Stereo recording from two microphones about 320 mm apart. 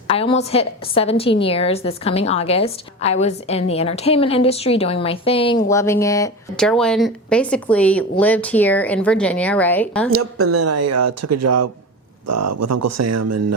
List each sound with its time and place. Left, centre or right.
0.1 s a woman's voice: centre
10.1 s speech: right